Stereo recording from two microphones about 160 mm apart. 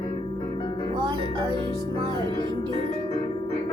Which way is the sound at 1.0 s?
25° right (ahead or behind).